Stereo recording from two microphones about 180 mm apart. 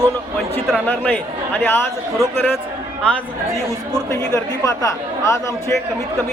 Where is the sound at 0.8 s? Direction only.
10° left (ahead or behind).